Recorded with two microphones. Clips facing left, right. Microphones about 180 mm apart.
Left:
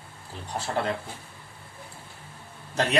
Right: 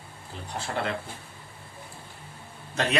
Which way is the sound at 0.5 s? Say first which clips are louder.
Left 3 dB; 35° left (ahead or behind).